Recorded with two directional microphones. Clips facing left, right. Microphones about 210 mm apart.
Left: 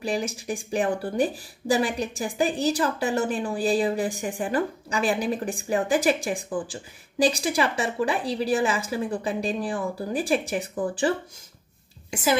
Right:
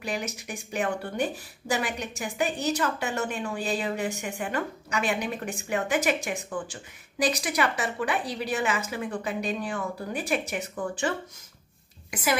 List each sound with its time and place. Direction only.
0.0 s speech: 30° left (ahead or behind)
12.1 s a child's voice: 25° left (ahead or behind)